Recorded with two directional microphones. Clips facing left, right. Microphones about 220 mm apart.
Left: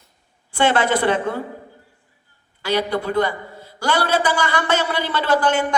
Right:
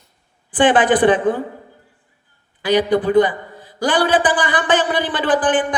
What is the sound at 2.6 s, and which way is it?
A man's voice, 15° right (ahead or behind).